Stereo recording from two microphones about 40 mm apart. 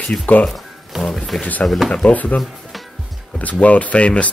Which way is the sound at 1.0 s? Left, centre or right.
Centre.